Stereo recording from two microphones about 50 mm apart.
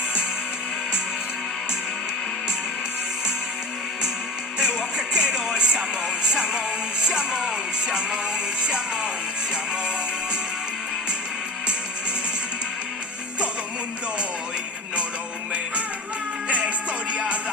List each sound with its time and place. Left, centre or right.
4.5 s music: centre
16.5 s music: right